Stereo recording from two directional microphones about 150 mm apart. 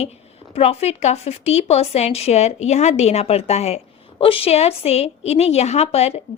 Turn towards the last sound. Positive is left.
turn(degrees=45)  # may be behind; listen again after turning